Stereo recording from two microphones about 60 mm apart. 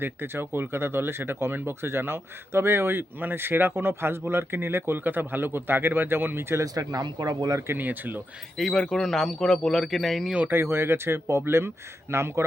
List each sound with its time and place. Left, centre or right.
0.0 s speech: right
6.7 s speech: right
7.7 s speech: right
8.5 s a man's voice: centre
10.5 s speech: right